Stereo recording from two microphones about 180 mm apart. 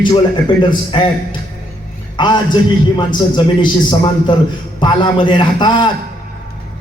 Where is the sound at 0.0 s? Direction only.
25° left (ahead or behind).